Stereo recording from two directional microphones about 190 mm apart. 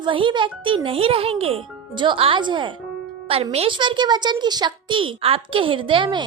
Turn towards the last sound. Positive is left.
turn(degrees=-25)  # may be behind; listen again after turning